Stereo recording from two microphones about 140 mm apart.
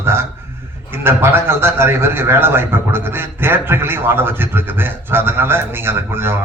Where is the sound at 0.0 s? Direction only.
15° right (ahead or behind).